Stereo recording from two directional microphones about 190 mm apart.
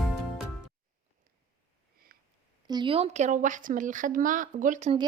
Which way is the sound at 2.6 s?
25° right (ahead or behind).